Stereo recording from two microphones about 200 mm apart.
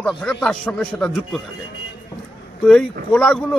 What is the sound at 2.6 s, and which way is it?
Speech, 5° left (ahead or behind).